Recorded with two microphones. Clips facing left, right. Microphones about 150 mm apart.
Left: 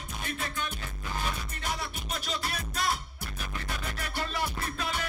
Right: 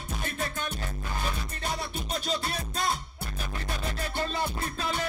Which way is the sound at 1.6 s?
30° right (ahead or behind).